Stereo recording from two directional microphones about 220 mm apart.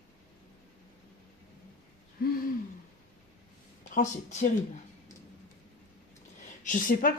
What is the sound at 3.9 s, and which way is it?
Speech, 35° left (ahead or behind).